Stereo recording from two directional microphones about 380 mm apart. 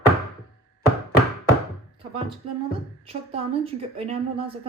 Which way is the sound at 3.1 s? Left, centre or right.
Centre.